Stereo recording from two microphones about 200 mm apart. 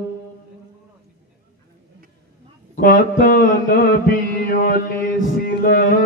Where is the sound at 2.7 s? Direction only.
45° left (ahead or behind).